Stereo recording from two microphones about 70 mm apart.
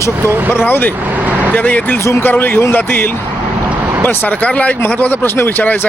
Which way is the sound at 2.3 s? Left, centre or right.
Left.